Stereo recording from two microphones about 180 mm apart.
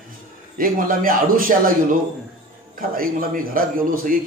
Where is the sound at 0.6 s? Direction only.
50° right (ahead or behind).